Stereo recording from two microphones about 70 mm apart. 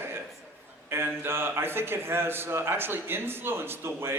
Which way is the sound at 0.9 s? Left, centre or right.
Right.